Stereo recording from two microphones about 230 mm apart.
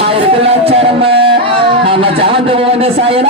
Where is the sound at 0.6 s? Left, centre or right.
Right.